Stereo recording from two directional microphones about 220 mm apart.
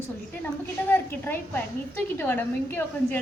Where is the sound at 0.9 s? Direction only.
10° left (ahead or behind).